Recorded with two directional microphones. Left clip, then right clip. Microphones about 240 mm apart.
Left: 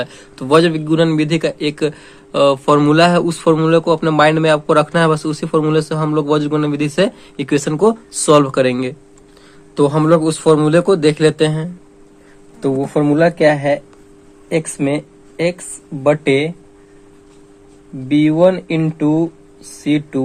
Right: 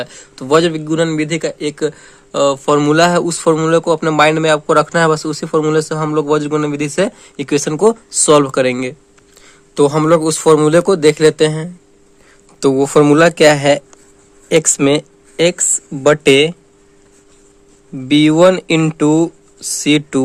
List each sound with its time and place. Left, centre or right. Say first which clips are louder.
0.0 s a man's voice: left 1 dB; right
12.5 s speech: right 6 dB; right
18.1 s speech: right 3 dB; right